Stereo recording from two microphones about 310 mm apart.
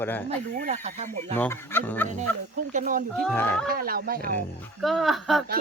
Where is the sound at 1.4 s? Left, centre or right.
Centre.